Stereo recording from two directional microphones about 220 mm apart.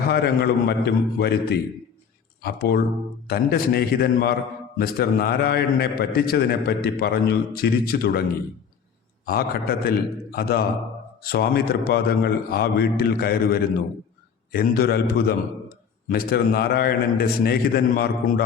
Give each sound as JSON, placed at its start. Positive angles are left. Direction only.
{"t": 0.1, "sound": "a man's voice", "side_deg": 45}
{"t": 9.2, "sound": "a man's voice", "side_deg": 45}